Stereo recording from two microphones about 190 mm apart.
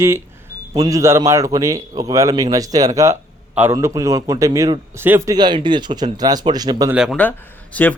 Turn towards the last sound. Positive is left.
turn(degrees=10)  # may be behind; listen again after turning